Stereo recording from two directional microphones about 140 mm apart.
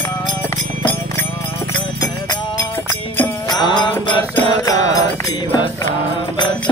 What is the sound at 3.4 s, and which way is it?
Mantra, 30° left (ahead or behind).